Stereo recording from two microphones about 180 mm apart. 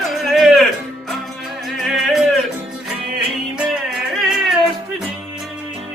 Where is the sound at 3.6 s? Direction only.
Centre (ahead or behind).